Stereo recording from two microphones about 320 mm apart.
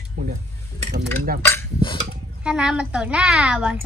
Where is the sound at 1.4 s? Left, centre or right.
Centre.